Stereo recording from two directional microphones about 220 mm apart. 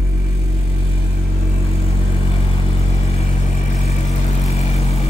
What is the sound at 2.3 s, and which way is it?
Vehicle, 25° left (ahead or behind).